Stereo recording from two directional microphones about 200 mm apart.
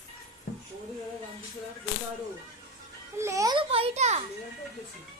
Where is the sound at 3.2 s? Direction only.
15° right (ahead or behind); by 4.2 s 35° right (ahead or behind).